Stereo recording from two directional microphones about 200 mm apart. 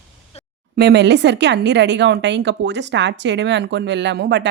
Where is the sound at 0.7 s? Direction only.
55° right (ahead or behind).